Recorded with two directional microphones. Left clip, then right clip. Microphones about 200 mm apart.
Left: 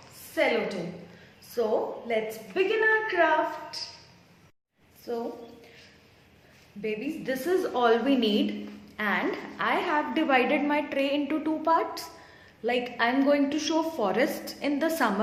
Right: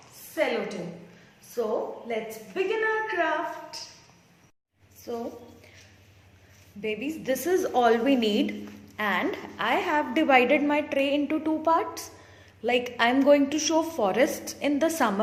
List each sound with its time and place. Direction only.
0.3 s a woman's voice: centre (ahead or behind)
5.1 s a woman's voice: 20° right (ahead or behind)
6.8 s a woman's voice: 30° right (ahead or behind)